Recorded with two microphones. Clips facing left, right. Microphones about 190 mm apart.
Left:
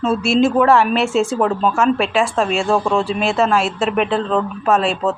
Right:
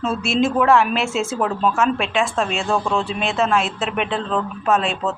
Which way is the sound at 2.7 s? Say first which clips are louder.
Left 3 dB; 30° left (ahead or behind).